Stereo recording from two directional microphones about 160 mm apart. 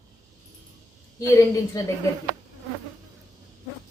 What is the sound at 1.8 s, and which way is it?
Speech, 20° left (ahead or behind).